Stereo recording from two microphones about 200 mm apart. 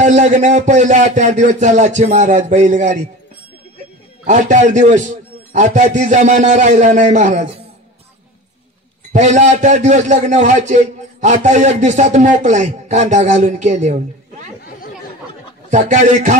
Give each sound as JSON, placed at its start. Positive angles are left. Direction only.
{"t": 0.0, "sound": "a man's voice", "side_deg": -35}
{"t": 4.3, "sound": "a man's voice", "side_deg": -40}
{"t": 9.1, "sound": "a man's voice", "side_deg": -35}
{"t": 15.7, "sound": "a man's voice", "side_deg": -40}